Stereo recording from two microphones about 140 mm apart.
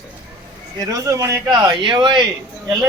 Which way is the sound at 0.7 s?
25° right (ahead or behind).